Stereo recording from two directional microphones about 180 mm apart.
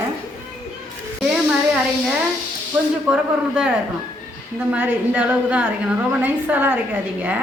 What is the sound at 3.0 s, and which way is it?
Speech, 5° right (ahead or behind).